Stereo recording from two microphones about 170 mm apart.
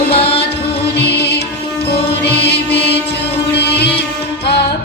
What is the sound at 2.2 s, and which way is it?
Mantra, 75° left (ahead or behind).